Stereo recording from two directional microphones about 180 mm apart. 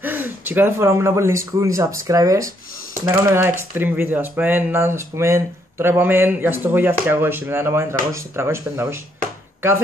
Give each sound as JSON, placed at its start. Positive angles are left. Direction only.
{"t": 0.0, "sound": "speech", "side_deg": -10}